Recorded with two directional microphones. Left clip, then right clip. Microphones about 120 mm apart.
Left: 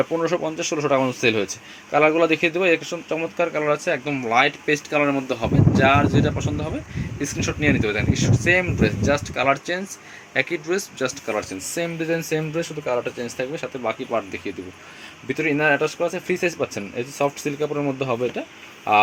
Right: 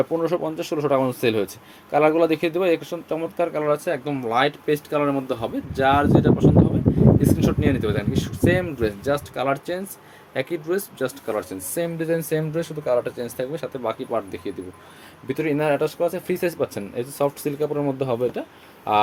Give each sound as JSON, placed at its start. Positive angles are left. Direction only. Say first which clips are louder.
{"t": 0.0, "sound": "speech", "louder": "even", "side_deg": -15}